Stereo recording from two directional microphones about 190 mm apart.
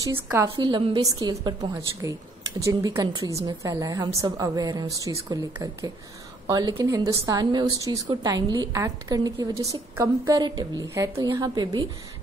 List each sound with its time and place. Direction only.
0.0 s speech: 15° right (ahead or behind)
0.6 s a woman's voice: 25° right (ahead or behind)